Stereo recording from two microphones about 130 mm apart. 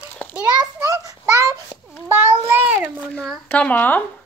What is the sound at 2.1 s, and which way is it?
Speech, 15° right (ahead or behind).